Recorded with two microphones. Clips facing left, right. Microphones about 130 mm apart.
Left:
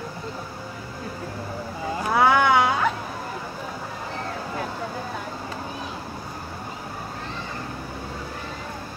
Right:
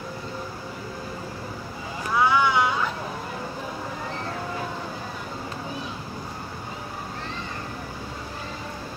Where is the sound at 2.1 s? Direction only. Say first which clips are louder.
Left 3 dB; 60° left (ahead or behind).